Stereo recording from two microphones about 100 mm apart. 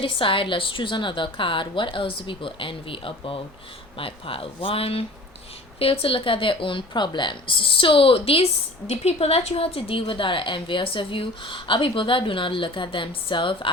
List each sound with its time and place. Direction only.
0.0 s a woman's voice: 60° left (ahead or behind)
8.9 s a woman's voice: 90° left; by 13.7 s 60° left (ahead or behind)